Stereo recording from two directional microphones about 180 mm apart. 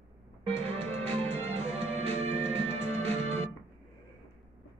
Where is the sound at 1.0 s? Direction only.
30° right (ahead or behind).